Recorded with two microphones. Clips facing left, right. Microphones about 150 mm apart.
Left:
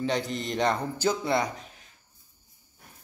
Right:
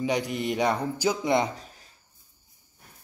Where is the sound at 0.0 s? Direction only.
10° right (ahead or behind).